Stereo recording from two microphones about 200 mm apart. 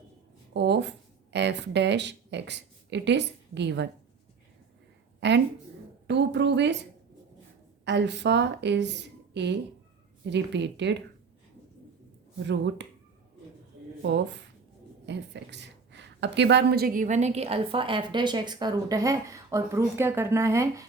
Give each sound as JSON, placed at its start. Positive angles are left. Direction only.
{"t": 0.5, "sound": "speech", "side_deg": -60}
{"t": 5.2, "sound": "a woman's voice", "side_deg": -60}
{"t": 7.9, "sound": "a woman's voice", "side_deg": -60}
{"t": 12.4, "sound": "a woman's voice", "side_deg": -60}
{"t": 14.0, "sound": "a woman's voice", "side_deg": -60}